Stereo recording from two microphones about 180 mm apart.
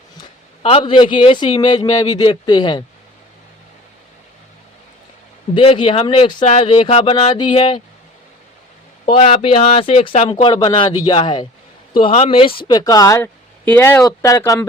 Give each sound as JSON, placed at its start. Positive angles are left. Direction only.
{"t": 0.6, "sound": "speech", "side_deg": 30}
{"t": 5.5, "sound": "speech", "side_deg": 30}
{"t": 9.0, "sound": "speech", "side_deg": 30}